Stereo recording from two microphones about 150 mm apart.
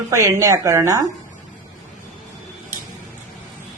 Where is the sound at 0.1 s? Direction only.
20° right (ahead or behind).